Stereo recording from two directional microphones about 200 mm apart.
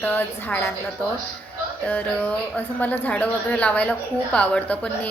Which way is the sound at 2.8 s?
10° left (ahead or behind).